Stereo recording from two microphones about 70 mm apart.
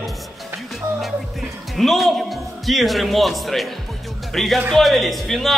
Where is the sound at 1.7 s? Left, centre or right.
Centre.